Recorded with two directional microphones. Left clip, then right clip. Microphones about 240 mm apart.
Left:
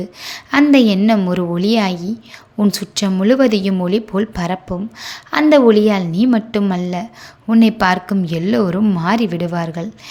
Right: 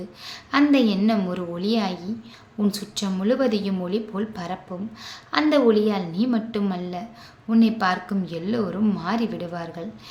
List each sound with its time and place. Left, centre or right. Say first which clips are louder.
0.0 s a woman's voice: left 9 dB; left